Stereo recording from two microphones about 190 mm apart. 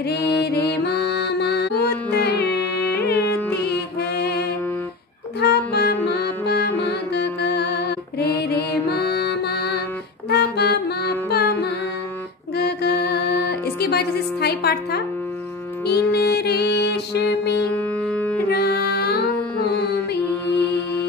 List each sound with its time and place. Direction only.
0.4 s music: 60° left (ahead or behind)
5.4 s music: 60° left (ahead or behind)
12.5 s music: 60° left (ahead or behind)
17.7 s music: 10° left (ahead or behind)
18.5 s music: 60° left (ahead or behind)